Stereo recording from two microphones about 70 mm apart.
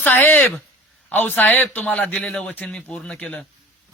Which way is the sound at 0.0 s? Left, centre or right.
Left.